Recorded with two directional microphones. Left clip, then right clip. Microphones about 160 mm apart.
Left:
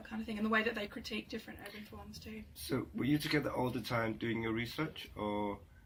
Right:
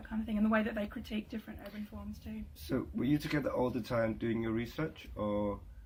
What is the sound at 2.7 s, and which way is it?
Speech, 30° right (ahead or behind).